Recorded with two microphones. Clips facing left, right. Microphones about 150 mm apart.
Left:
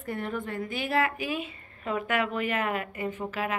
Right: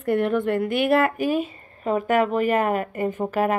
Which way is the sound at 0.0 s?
70° right (ahead or behind).